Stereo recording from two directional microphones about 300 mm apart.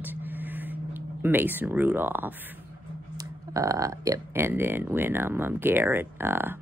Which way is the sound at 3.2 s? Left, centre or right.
Centre.